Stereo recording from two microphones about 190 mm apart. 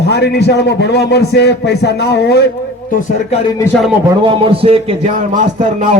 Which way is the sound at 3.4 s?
15° left (ahead or behind).